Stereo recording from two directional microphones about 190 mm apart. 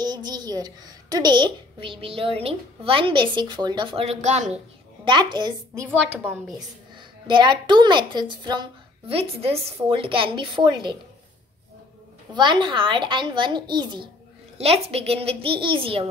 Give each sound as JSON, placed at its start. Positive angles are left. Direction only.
{"t": 0.0, "sound": "a woman's voice", "side_deg": -20}
{"t": 5.0, "sound": "a woman's voice", "side_deg": -25}
{"t": 5.9, "sound": "a woman's voice", "side_deg": -10}
{"t": 7.0, "sound": "a woman's voice", "side_deg": -25}
{"t": 12.4, "sound": "a woman's voice", "side_deg": -25}